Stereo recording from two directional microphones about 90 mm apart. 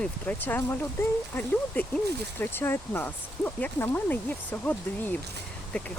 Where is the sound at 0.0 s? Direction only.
20° left (ahead or behind).